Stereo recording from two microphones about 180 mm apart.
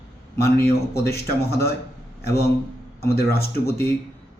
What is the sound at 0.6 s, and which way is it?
Speech, 65° left (ahead or behind).